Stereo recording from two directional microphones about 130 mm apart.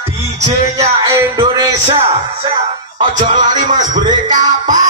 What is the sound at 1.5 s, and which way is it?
Music, 35° right (ahead or behind).